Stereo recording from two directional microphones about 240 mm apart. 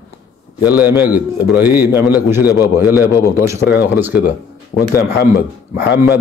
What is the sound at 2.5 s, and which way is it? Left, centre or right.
Speech, centre.